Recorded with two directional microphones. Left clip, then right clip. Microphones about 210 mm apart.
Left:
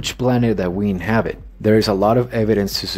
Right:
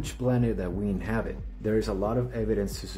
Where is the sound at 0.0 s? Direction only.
35° left (ahead or behind).